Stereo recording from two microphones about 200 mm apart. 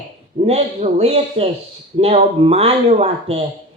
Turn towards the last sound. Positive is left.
turn(degrees=-30)  # may be behind; listen again after turning